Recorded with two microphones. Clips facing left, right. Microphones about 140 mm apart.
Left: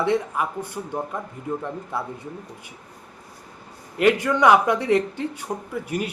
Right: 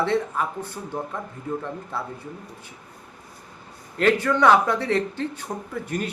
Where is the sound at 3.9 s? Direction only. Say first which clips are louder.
Left 1 dB; 15° left (ahead or behind).